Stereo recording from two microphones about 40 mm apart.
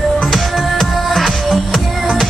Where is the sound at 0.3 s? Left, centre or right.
Centre.